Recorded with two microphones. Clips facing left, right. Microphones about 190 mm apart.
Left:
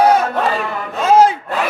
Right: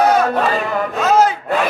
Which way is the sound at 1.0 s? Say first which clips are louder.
Left 3 dB; 30° left (ahead or behind).